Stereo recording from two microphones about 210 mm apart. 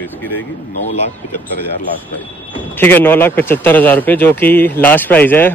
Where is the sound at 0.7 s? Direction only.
35° left (ahead or behind).